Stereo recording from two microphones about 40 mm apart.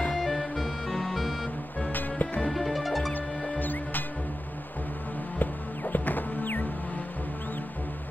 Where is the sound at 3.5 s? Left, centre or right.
Left.